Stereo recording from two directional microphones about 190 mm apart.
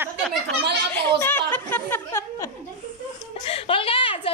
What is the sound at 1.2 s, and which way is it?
Speech, 10° left (ahead or behind).